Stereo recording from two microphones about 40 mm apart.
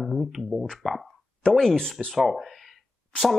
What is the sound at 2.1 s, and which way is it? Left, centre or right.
Speech, centre.